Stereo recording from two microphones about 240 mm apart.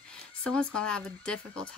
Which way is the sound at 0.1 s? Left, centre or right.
Centre.